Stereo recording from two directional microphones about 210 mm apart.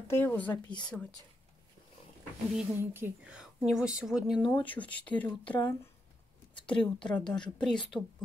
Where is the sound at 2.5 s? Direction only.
10° right (ahead or behind).